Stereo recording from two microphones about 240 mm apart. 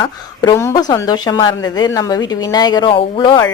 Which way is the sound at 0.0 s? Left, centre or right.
Centre.